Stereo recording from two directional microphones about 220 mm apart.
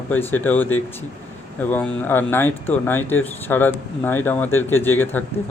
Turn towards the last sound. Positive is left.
turn(degrees=10)  # may be behind; listen again after turning